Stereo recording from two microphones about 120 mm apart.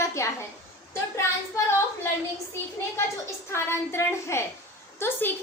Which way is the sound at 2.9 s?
20° left (ahead or behind).